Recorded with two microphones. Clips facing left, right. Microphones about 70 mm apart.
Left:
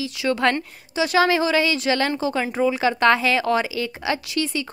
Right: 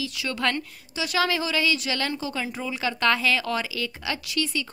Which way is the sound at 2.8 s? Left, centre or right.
Left.